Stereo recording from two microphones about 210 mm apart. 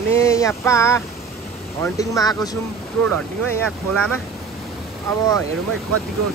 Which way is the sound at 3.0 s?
Centre (ahead or behind).